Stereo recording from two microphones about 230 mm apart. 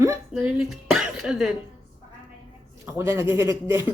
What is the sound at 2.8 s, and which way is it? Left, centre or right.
Speech, centre.